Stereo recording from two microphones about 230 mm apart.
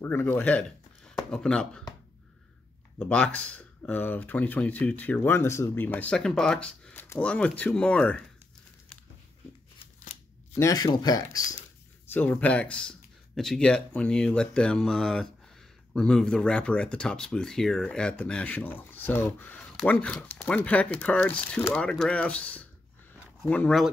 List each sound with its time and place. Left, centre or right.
0.0 s speech: centre
3.0 s speech: centre
10.5 s speech: centre